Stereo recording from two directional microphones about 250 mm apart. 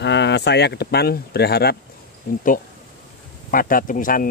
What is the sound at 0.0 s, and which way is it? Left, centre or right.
Speech, left.